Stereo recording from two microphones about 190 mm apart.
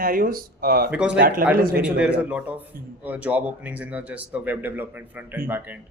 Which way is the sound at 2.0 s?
5° right (ahead or behind).